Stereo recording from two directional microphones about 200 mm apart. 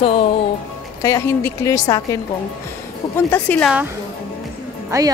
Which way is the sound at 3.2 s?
10° left (ahead or behind).